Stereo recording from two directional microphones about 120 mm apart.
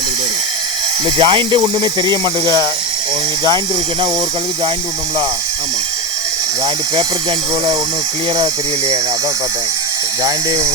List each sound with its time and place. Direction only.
1.2 s speech: 45° right (ahead or behind)
10.2 s speech: 30° right (ahead or behind)